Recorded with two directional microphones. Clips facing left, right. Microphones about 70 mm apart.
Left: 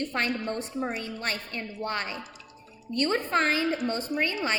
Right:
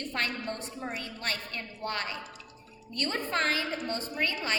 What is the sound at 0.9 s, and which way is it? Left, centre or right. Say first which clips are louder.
A woman's voice: left 3 dB; centre.